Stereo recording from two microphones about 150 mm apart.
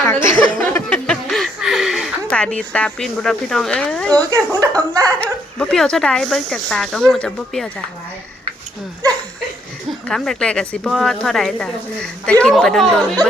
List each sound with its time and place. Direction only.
0.3 s a sound: 10° left (ahead or behind)
4.3 s speech: 25° right (ahead or behind)
5.2 s speech: 5° left (ahead or behind)
10.1 s speech: centre (ahead or behind)